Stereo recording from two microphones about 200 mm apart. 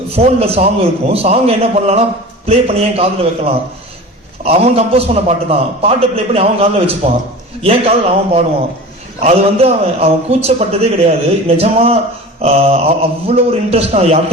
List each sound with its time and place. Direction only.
0.2 s a man's voice: 30° right (ahead or behind)